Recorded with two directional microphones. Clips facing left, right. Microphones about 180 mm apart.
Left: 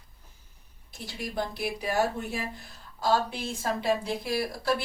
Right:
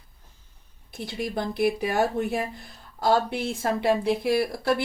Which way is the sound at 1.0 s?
60° right (ahead or behind).